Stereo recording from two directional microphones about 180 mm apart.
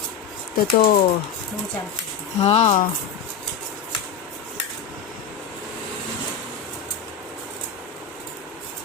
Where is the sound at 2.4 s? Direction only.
40° left (ahead or behind).